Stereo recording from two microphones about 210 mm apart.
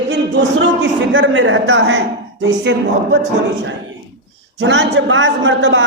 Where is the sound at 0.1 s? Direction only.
55° right (ahead or behind).